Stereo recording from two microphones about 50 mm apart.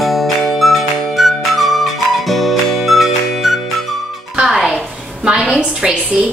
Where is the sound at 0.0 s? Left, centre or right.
Centre.